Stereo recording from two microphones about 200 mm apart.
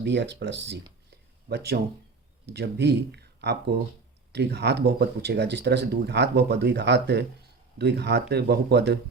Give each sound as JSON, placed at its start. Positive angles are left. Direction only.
{"t": 0.0, "sound": "speech", "side_deg": -60}